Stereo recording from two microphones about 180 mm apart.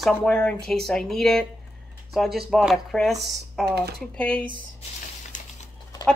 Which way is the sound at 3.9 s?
5° left (ahead or behind).